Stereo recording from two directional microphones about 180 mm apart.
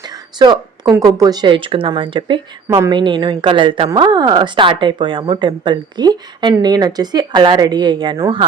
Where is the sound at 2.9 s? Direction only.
25° right (ahead or behind).